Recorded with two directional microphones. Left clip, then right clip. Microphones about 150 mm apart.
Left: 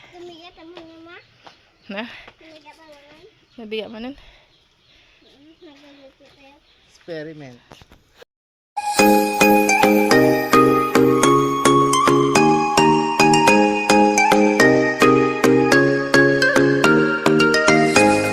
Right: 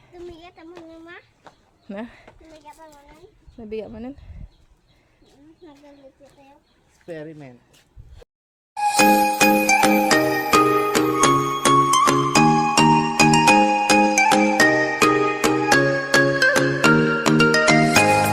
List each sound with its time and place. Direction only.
0.3 s a sound: 30° left (ahead or behind)
0.7 s a sound: 5° left (ahead or behind)
1.9 s speech: 15° right (ahead or behind)
3.6 s speech: centre (ahead or behind)
7.1 s speech: 55° left (ahead or behind)
8.7 s music: centre (ahead or behind)